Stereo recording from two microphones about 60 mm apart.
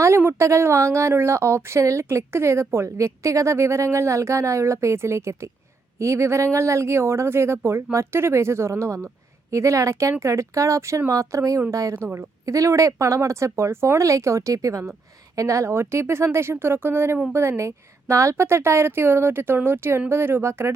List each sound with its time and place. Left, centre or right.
0.2 s a woman's voice: right
17.6 s speech: right